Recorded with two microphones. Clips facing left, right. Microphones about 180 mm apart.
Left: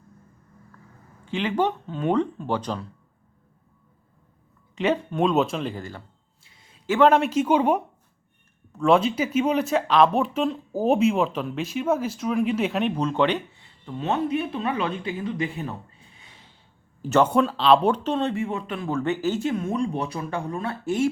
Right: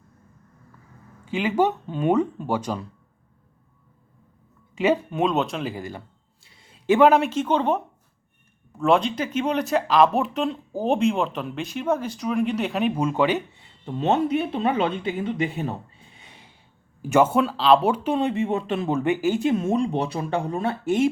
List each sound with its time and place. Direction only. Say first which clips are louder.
1.2 s speech: right 2 dB; 10° right (ahead or behind)
4.7 s speech: right 2 dB; 5° right (ahead or behind)
6.8 s speech: right 2 dB; 15° right (ahead or behind)
7.3 s speech: left 2 dB; 10° left (ahead or behind)
8.8 s speech: left 1 dB; centre (ahead or behind)
14.0 s speech: right 3 dB; 25° right (ahead or behind)
16.2 s a sound: right 4 dB; 20° right (ahead or behind)
17.0 s speech: right 1 dB; 10° right (ahead or behind)